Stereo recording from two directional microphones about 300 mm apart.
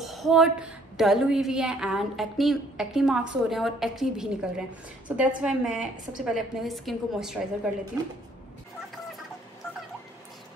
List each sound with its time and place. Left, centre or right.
0.0 s a woman's voice: centre